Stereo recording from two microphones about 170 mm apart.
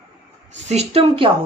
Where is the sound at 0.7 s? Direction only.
35° right (ahead or behind).